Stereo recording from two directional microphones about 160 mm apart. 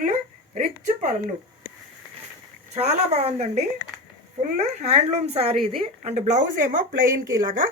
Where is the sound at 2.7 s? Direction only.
40° right (ahead or behind).